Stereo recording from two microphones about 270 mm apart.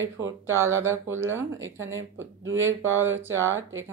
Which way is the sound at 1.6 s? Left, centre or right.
Right.